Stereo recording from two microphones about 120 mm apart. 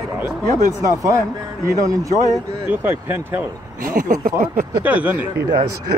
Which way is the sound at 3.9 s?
90° right.